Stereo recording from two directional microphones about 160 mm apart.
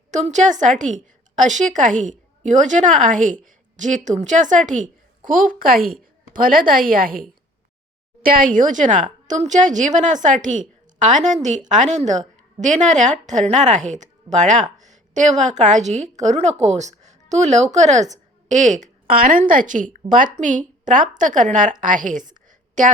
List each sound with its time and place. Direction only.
0.1 s a woman's voice: 45° right (ahead or behind)